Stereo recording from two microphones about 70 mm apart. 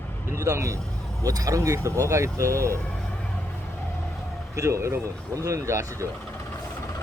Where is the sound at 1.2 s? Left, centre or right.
Right.